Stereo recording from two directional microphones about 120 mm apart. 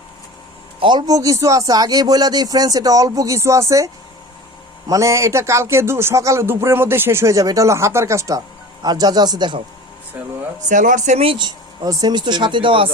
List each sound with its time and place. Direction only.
0.8 s a man's voice: 40° right (ahead or behind)
10.7 s speech: 90° right
11.3 s speech: 40° right (ahead or behind)